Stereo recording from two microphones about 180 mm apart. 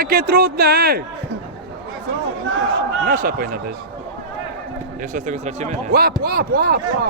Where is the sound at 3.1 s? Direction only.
50° right (ahead or behind).